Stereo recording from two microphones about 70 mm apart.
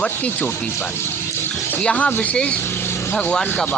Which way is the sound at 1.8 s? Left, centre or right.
Centre.